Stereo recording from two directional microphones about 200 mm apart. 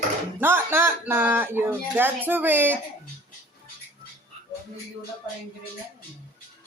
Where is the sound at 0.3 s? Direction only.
10° right (ahead or behind).